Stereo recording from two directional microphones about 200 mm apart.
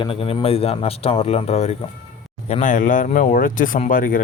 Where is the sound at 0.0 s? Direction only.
25° left (ahead or behind).